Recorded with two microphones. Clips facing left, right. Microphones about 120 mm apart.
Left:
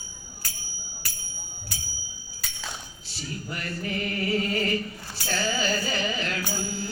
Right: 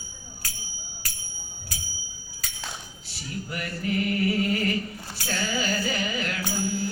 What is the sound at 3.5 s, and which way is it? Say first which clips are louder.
Mantra: right 4 dB; 30° left (ahead or behind).